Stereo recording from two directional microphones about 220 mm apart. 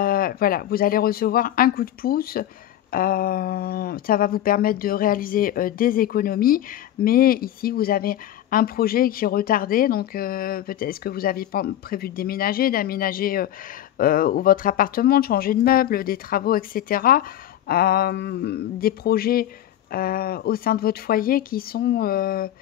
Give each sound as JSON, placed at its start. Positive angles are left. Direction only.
{"t": 0.0, "sound": "speech", "side_deg": 40}